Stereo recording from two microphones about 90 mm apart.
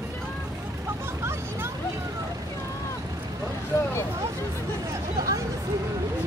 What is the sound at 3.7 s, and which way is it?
Vehicle, 35° left (ahead or behind).